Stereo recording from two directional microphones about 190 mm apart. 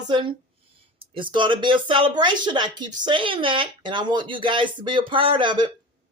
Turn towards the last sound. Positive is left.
turn(degrees=-25)  # may be behind; listen again after turning